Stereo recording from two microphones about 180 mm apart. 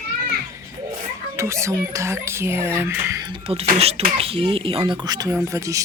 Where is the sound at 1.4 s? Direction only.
15° right (ahead or behind).